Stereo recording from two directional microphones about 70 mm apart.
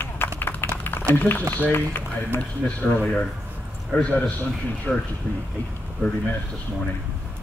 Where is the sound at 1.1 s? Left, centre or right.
Left.